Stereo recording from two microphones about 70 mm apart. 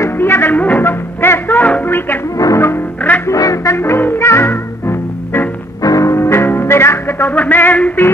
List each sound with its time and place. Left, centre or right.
0.0 s music: left
1.6 s a sound: left
2.3 s music: left
3.7 s music: left
5.8 s music: left
6.1 s music: left
7.3 s a sound: left